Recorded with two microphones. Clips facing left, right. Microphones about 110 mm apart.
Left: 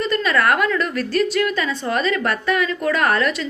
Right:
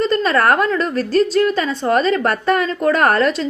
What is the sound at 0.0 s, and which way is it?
A woman's voice, 35° right (ahead or behind).